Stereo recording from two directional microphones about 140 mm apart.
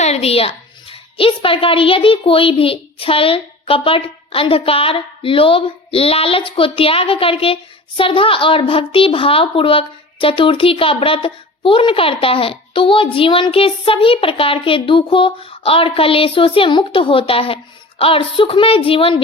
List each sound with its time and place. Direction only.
0.0 s a woman's voice: 50° left (ahead or behind)